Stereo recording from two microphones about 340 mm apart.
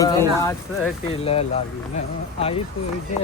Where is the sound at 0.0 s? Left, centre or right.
Centre.